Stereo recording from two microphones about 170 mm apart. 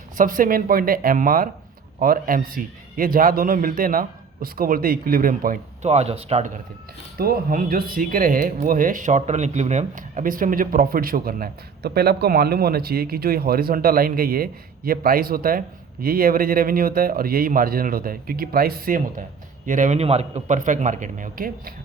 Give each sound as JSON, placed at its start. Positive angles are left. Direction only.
{"t": 0.2, "sound": "speech", "side_deg": -55}
{"t": 5.9, "sound": "speech", "side_deg": -40}
{"t": 7.2, "sound": "a man's voice", "side_deg": -60}